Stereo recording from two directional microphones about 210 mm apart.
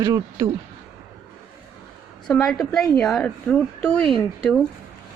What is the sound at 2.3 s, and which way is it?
A woman's voice, centre (ahead or behind).